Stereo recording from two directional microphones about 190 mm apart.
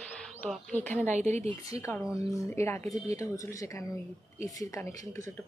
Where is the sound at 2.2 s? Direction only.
15° left (ahead or behind).